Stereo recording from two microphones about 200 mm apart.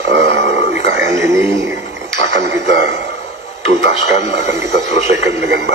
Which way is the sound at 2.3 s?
60° right (ahead or behind).